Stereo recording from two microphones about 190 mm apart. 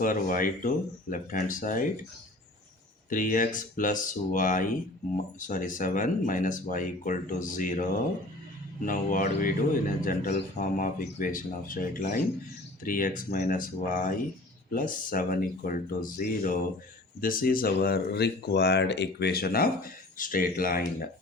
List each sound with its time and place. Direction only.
0.0 s speech: 45° left (ahead or behind)
3.1 s speech: 45° left (ahead or behind)